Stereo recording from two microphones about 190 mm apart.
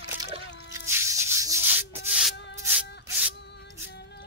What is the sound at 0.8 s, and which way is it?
Rub, 15° right (ahead or behind).